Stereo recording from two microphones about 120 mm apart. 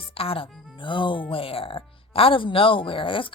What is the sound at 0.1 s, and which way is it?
Speech, 50° left (ahead or behind).